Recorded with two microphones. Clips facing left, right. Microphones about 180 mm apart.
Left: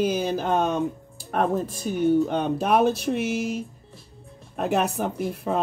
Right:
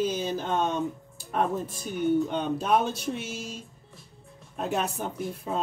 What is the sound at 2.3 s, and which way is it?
Speech, 65° left (ahead or behind).